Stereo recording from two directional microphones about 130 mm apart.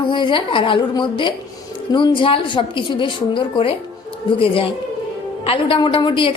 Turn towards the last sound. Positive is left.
turn(degrees=40)  # may be behind; listen again after turning